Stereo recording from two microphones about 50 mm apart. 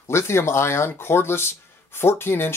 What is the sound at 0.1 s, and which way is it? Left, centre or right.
Speech, left.